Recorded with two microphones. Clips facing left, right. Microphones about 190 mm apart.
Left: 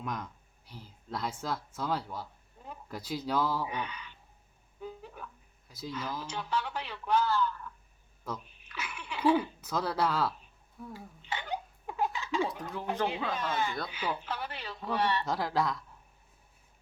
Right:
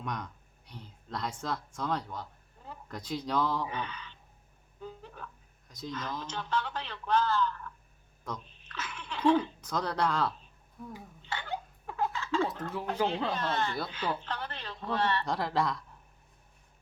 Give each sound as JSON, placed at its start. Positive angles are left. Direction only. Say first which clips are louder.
{"t": 0.0, "sound": "speech", "louder": "even", "side_deg": 5}
{"t": 11.2, "sound": "laughter", "louder": "left 1 dB", "side_deg": 15}
{"t": 13.3, "sound": "speech", "louder": "right 1 dB", "side_deg": 10}
{"t": 15.3, "sound": "speech", "louder": "even", "side_deg": 0}